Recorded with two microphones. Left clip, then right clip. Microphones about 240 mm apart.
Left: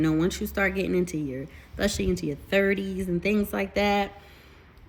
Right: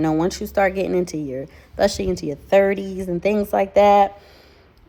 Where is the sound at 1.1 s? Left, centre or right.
Right.